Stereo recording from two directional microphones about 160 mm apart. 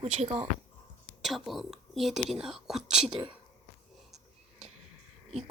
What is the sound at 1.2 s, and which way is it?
Speech, centre (ahead or behind).